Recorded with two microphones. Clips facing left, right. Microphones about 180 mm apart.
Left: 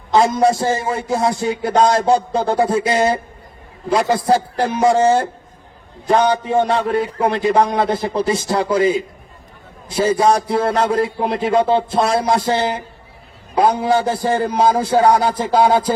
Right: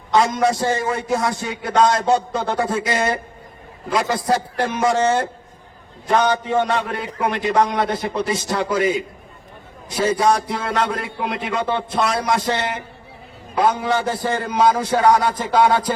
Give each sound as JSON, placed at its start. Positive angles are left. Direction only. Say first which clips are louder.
{"t": 0.1, "sound": "a man's voice", "louder": "left 3 dB", "side_deg": 25}
{"t": 6.5, "sound": "a man's voice", "louder": "left 4 dB", "side_deg": 30}